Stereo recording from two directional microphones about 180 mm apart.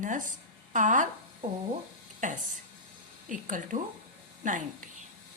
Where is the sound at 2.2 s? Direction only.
45° right (ahead or behind).